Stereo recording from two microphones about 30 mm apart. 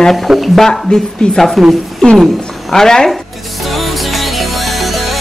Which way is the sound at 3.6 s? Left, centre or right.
Centre.